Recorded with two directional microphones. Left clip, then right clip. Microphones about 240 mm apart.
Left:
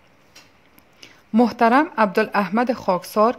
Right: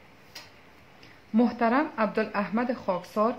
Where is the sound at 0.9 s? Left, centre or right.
Left.